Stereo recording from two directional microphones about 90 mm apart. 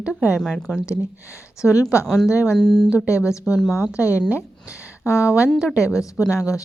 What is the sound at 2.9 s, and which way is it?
A woman's voice, 35° left (ahead or behind).